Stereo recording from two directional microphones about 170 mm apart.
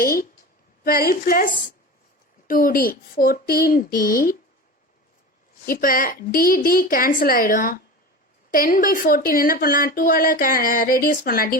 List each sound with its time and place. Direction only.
0.0 s a woman's voice: 55° left (ahead or behind)
5.6 s speech: 55° left (ahead or behind)